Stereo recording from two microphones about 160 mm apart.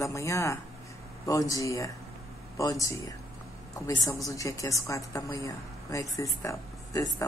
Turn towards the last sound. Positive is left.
turn(degrees=20)  # may be behind; listen again after turning